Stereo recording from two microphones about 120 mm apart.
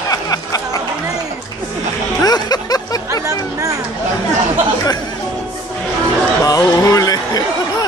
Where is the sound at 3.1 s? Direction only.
30° right (ahead or behind).